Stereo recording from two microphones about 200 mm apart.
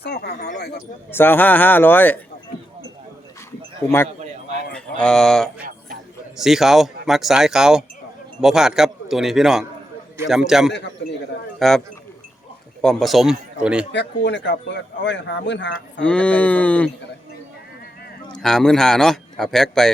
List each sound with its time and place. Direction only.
0.0 s speech: 55° left (ahead or behind)
1.1 s speech: 10° left (ahead or behind)
3.8 s a man's voice: 10° left (ahead or behind)
12.8 s a man's voice: centre (ahead or behind)
13.9 s speech: 60° left (ahead or behind)
16.0 s speech: 5° left (ahead or behind)
18.3 s a man's voice: 5° left (ahead or behind)